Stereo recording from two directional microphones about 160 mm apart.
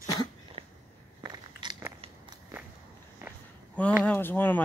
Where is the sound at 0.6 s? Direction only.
40° right (ahead or behind).